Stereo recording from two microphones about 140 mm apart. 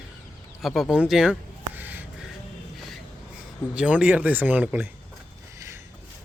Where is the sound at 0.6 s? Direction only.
Centre (ahead or behind).